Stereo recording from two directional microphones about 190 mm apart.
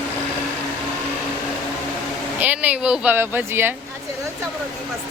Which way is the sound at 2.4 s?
10° right (ahead or behind).